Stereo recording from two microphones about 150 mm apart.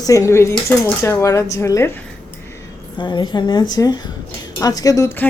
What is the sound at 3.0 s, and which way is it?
A woman's voice, 30° left (ahead or behind).